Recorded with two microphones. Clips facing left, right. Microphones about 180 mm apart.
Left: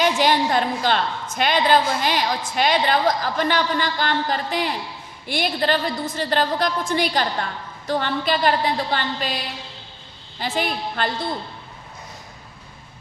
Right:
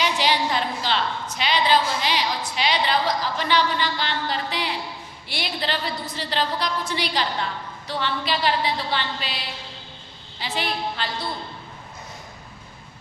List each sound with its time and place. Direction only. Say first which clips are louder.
0.0 s a woman's voice: left 4 dB; 50° left (ahead or behind)
10.4 s a woman's voice: left 3 dB; 50° left (ahead or behind)